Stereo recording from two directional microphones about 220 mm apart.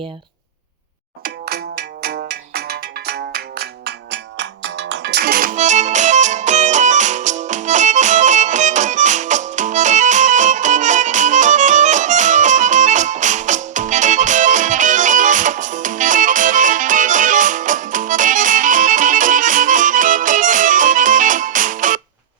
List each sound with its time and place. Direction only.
1.2 s music: 45° right (ahead or behind)